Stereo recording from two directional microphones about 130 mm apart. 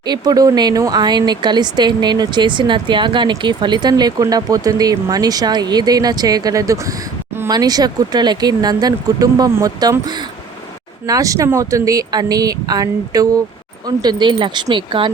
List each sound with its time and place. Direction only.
0.0 s speech: 30° right (ahead or behind)